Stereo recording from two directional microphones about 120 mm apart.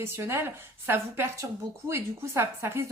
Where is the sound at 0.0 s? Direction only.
20° right (ahead or behind).